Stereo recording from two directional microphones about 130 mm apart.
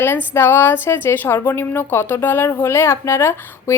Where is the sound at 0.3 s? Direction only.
15° left (ahead or behind).